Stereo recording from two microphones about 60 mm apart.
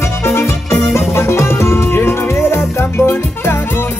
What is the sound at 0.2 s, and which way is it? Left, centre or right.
Music, left.